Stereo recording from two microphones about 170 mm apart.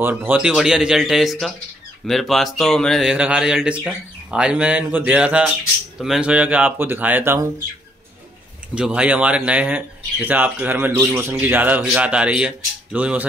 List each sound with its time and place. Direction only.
0.0 s speech: 10° right (ahead or behind)
8.7 s speech: 5° right (ahead or behind)